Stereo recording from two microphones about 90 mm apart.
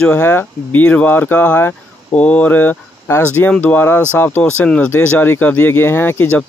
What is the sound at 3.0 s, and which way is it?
Speech, 30° left (ahead or behind).